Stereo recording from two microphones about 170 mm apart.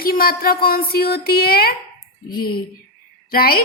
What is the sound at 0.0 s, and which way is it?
A woman's voice, 60° left (ahead or behind).